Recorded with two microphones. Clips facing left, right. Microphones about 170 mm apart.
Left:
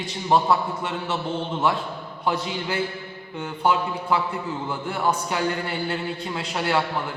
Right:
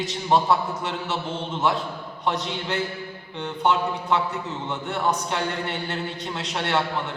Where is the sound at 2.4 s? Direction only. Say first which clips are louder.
Left 1 dB; 5° left (ahead or behind).